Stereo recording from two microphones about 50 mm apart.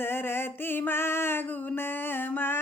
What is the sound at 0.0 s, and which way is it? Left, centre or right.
Music, left.